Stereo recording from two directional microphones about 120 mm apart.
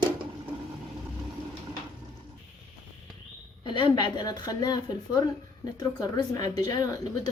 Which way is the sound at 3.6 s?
40° left (ahead or behind).